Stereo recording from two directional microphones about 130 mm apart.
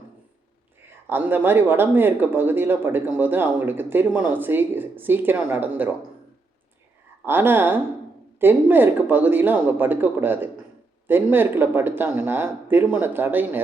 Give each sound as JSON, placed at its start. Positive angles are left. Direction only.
{"t": 1.1, "sound": "speech", "side_deg": -15}
{"t": 7.3, "sound": "speech", "side_deg": -15}